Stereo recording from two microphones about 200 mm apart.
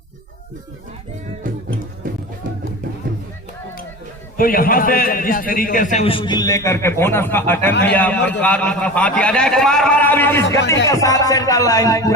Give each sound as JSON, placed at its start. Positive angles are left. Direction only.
{"t": 4.4, "sound": "a man's voice", "side_deg": 45}